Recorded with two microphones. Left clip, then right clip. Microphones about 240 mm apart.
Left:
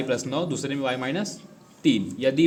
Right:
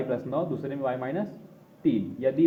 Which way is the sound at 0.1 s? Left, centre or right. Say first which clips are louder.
Left 2 dB; left.